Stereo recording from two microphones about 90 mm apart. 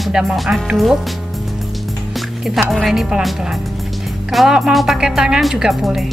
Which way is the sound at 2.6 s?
Centre (ahead or behind).